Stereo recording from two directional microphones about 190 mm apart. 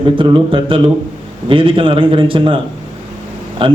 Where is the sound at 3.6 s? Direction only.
25° right (ahead or behind).